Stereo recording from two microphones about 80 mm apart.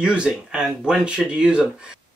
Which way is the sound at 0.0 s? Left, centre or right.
Centre.